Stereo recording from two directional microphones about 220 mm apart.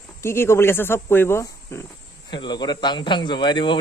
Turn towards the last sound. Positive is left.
turn(degrees=20)  # may be behind; listen again after turning